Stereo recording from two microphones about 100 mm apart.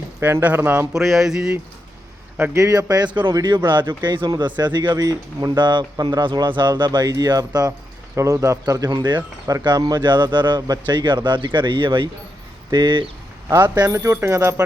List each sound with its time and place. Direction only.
0.2 s speech: 20° right (ahead or behind)
0.9 s a sound: centre (ahead or behind)
2.4 s speech: 30° right (ahead or behind); by 13.1 s 50° right (ahead or behind)
13.9 s speech: 30° right (ahead or behind)